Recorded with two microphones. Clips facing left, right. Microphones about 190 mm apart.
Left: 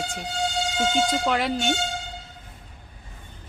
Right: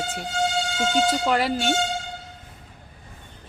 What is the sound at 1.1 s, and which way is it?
Speech, 5° right (ahead or behind).